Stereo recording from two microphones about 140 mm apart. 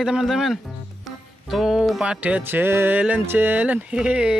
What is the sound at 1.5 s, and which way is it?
Music, 5° right (ahead or behind).